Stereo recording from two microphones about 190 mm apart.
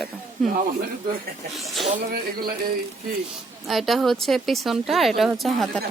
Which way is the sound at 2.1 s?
50° right (ahead or behind).